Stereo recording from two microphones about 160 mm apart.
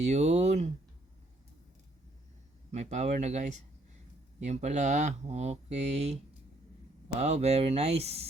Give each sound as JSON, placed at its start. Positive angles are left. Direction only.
{"t": 0.0, "sound": "speech", "side_deg": -45}
{"t": 2.7, "sound": "speech", "side_deg": -45}
{"t": 7.2, "sound": "speech", "side_deg": -40}